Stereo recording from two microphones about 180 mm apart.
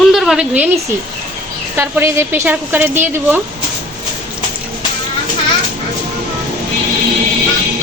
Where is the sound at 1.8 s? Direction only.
15° right (ahead or behind).